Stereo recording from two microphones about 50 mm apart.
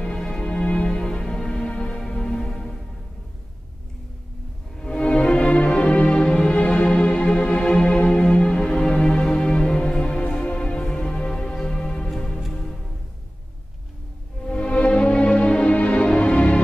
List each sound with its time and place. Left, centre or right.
0.0 s music: centre
4.7 s music: centre
14.4 s music: centre